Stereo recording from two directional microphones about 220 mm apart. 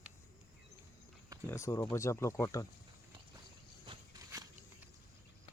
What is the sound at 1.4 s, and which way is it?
Speech, 15° left (ahead or behind).